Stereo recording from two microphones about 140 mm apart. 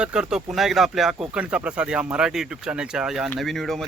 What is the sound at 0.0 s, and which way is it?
Speech, 5° right (ahead or behind).